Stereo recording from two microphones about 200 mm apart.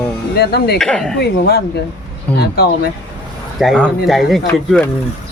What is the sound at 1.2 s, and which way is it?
Speech, 55° left (ahead or behind).